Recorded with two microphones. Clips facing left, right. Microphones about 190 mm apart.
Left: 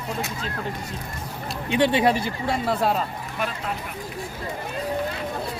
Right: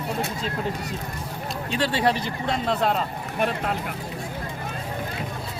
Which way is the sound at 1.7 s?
15° left (ahead or behind).